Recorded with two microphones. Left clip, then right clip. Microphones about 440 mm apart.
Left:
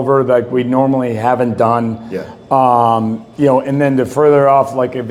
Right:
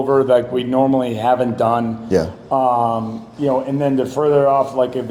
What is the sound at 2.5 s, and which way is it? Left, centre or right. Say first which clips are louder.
A man's voice: left 6 dB; left.